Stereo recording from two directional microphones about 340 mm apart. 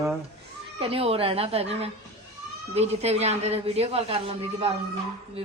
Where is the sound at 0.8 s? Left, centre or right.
Centre.